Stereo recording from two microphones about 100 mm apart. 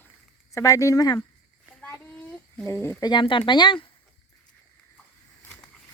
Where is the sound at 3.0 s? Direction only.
50° left (ahead or behind).